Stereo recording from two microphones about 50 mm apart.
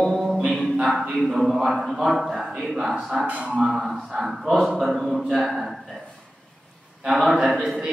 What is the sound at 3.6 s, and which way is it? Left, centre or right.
A man's voice, centre.